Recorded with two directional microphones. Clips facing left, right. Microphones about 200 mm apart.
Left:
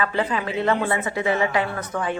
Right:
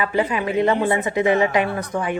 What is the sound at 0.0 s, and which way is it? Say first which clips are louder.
Speech: right 3 dB; 15° right (ahead or behind).